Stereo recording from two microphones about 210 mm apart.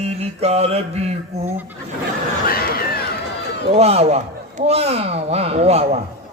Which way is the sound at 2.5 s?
45° left (ahead or behind).